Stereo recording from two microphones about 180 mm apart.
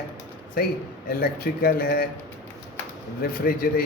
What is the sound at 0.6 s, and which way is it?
Speech, 55° left (ahead or behind).